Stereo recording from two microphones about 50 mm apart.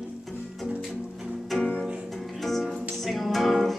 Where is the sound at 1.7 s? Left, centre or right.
Centre.